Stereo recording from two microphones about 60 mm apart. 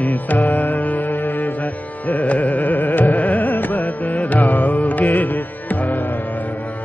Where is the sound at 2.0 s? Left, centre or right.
Left.